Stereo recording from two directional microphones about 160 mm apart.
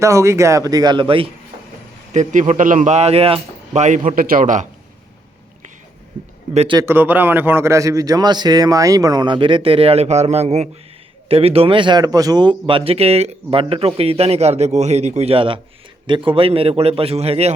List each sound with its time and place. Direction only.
0.0 s a man's voice: 15° right (ahead or behind); by 1.3 s 35° right (ahead or behind)
2.1 s speech: 45° right (ahead or behind)
6.5 s speech: 40° right (ahead or behind)
6.7 s a man's voice: 15° right (ahead or behind); by 17.5 s 40° right (ahead or behind)